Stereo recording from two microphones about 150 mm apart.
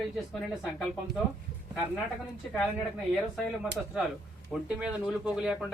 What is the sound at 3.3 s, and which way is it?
Speech, centre (ahead or behind).